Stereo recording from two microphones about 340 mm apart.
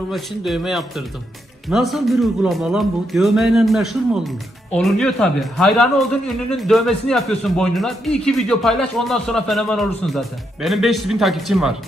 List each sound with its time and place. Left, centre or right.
0.1 s speech: centre